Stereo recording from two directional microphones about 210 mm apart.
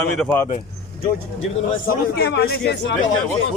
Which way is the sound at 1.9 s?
50° left (ahead or behind).